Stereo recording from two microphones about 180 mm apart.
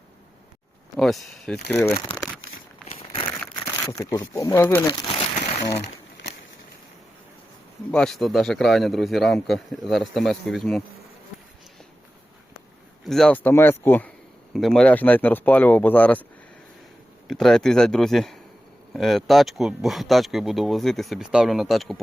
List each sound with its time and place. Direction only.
0.9 s speech: centre (ahead or behind)
2.0 s speech: 25° left (ahead or behind)
2.8 s crumpling: 35° left (ahead or behind)
4.1 s speech: 20° left (ahead or behind)
4.9 s speech: 25° left (ahead or behind)
5.4 s a sound: 40° left (ahead or behind)
5.8 s a sound: 70° left (ahead or behind)
7.9 s speech: 5° left (ahead or behind)
13.1 s speech: 5° left (ahead or behind)
17.2 s speech: centre (ahead or behind)